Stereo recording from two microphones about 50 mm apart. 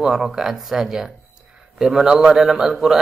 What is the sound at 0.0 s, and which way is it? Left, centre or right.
Mantra, centre.